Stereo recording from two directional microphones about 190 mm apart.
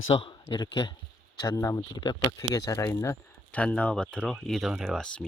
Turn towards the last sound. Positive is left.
turn(degrees=0)  # may be behind; listen again after turning